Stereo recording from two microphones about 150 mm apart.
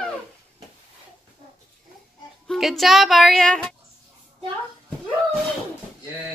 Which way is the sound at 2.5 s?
Centre (ahead or behind).